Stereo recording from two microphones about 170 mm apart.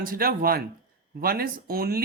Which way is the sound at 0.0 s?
55° right (ahead or behind).